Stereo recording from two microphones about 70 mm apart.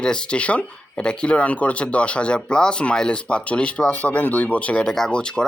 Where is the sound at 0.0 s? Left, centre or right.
Centre.